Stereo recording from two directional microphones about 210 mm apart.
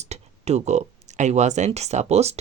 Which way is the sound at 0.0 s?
30° right (ahead or behind).